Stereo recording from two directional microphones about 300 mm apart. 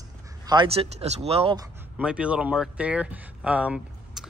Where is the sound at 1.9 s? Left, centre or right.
Centre.